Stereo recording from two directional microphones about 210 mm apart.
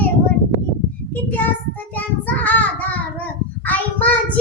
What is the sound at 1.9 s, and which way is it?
Child singing, 10° left (ahead or behind).